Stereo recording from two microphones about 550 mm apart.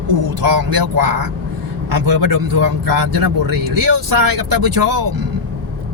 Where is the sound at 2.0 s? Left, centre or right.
Right.